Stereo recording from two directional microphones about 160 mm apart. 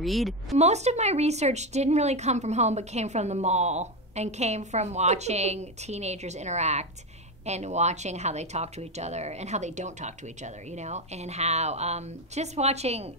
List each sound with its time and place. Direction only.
0.0 s a woman's voice: centre (ahead or behind)
0.6 s speech: 45° right (ahead or behind)